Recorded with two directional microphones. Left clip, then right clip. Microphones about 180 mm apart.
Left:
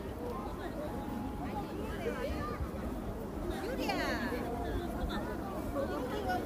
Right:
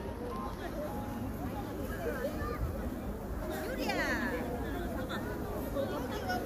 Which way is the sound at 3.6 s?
55° left (ahead or behind).